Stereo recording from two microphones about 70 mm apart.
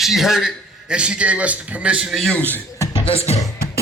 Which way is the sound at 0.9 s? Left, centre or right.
Centre.